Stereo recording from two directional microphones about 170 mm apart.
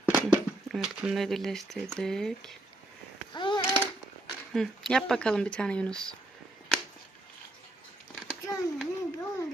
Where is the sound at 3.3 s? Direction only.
25° left (ahead or behind).